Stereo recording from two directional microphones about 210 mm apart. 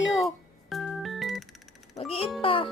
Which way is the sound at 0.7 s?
Centre (ahead or behind).